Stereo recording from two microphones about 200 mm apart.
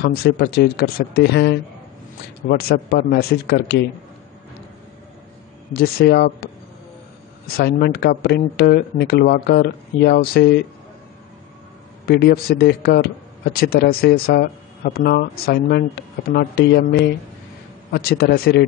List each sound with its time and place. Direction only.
0.0 s speech: 50° left (ahead or behind)
2.4 s speech: 45° left (ahead or behind)
5.7 s speech: 50° left (ahead or behind)
12.1 s speech: 55° left (ahead or behind)